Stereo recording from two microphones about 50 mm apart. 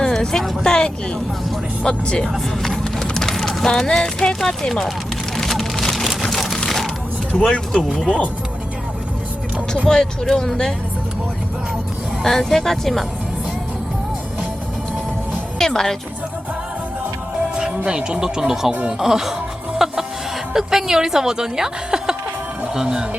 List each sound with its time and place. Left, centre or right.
0.0 s speech: centre
1.8 s speech: centre
3.0 s clip-clop: centre
3.7 s speech: centre
5.4 s a sound: centre
7.4 s speech: centre
7.8 s speech: centre
9.8 s speech: centre
12.2 s speech: centre
15.5 s music: centre
17.5 s music: centre
17.7 s speech: right
19.8 s music: centre
20.5 s speech: centre